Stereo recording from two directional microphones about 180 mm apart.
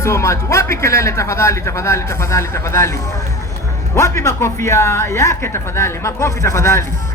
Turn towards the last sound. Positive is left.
turn(degrees=15)  # may be behind; listen again after turning